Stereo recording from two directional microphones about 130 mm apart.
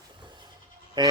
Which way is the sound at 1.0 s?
35° right (ahead or behind).